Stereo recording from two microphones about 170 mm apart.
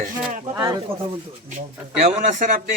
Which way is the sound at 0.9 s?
35° right (ahead or behind).